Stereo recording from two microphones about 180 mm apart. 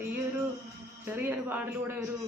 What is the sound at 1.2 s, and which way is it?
Speech, 10° right (ahead or behind).